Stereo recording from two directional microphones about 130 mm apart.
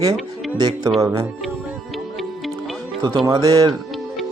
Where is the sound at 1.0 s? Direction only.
20° right (ahead or behind).